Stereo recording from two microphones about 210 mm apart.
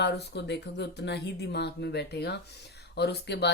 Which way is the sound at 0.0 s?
50° left (ahead or behind).